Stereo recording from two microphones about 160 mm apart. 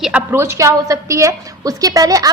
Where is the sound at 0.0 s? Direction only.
10° right (ahead or behind).